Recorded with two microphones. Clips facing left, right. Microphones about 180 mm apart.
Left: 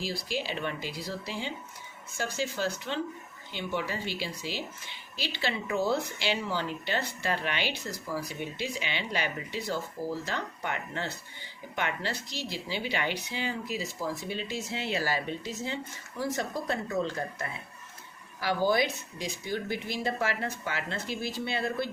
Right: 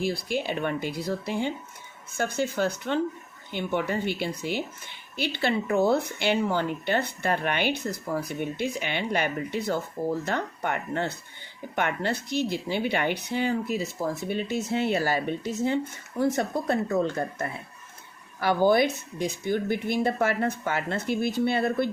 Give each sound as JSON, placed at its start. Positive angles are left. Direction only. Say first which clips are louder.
{"t": 0.0, "sound": "a woman's voice", "louder": "right 6 dB", "side_deg": -55}